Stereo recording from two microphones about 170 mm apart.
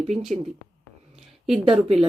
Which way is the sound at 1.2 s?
Centre (ahead or behind).